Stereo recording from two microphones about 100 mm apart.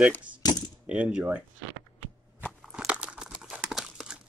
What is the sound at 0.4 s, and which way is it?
Coin, 40° left (ahead or behind).